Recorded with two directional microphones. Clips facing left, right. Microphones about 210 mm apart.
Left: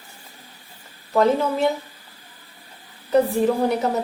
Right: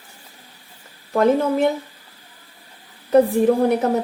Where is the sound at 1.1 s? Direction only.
55° right (ahead or behind).